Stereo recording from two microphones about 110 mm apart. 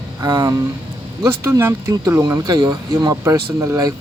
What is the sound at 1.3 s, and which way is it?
Speech, 25° right (ahead or behind).